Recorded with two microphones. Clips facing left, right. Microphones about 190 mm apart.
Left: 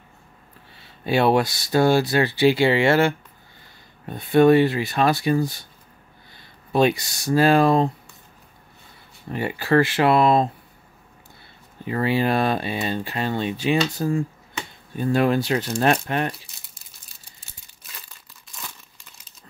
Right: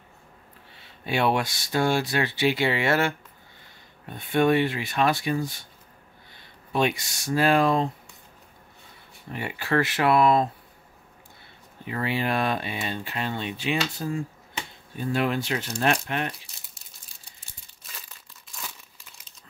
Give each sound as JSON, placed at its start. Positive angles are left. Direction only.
{"t": 0.7, "sound": "speech", "side_deg": 35}
{"t": 6.7, "sound": "speech", "side_deg": 35}
{"t": 9.3, "sound": "speech", "side_deg": 35}
{"t": 11.8, "sound": "speech", "side_deg": 35}
{"t": 18.5, "sound": "crumpling", "side_deg": 0}